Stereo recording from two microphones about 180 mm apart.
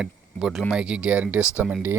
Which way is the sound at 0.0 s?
5° right (ahead or behind).